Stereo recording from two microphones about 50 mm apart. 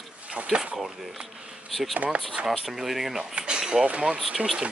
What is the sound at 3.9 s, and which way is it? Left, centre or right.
Speech, right.